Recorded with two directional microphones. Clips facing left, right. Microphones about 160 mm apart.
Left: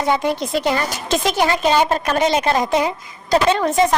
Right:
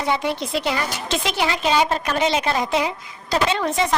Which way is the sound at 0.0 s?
45° left (ahead or behind).